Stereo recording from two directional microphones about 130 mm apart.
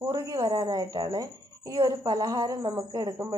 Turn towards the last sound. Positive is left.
turn(degrees=-30)  # may be behind; listen again after turning